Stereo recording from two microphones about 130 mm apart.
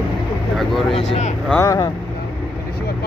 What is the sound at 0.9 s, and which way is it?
Speech, 60° left (ahead or behind).